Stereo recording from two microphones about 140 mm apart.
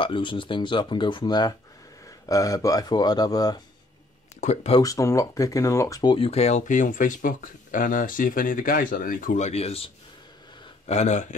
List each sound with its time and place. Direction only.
0.0 s speech: 35° left (ahead or behind)
4.4 s speech: 55° left (ahead or behind)
4.8 s speech: 20° left (ahead or behind)
6.1 s speech: 45° left (ahead or behind)
10.9 s speech: 55° left (ahead or behind)